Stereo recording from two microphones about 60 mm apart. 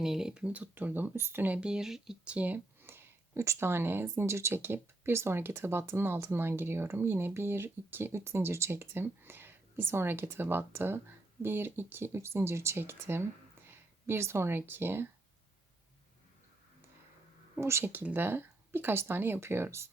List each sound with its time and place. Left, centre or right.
0.0 s speech: centre
0.4 s speech: right
1.5 s speech: centre
2.3 s speech: right
2.8 s a sound: right
4.1 s speech: right
17.6 s speech: right